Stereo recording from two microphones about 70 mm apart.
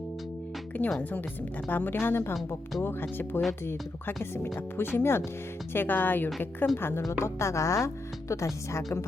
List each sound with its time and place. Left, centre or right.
0.7 s a woman's voice: left